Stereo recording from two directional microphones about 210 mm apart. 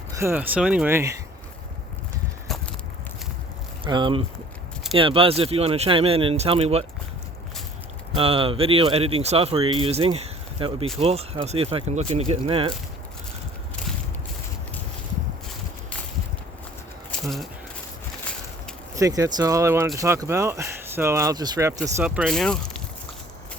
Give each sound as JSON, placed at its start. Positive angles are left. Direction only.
{"t": 0.1, "sound": "speech", "side_deg": -10}
{"t": 2.5, "sound": "a sound", "side_deg": 0}
{"t": 3.8, "sound": "speech", "side_deg": -20}
{"t": 8.1, "sound": "speech", "side_deg": -25}
{"t": 17.1, "sound": "a sound", "side_deg": 0}
{"t": 18.9, "sound": "speech", "side_deg": -15}